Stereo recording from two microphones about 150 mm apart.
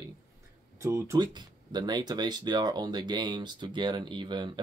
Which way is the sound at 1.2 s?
30° right (ahead or behind).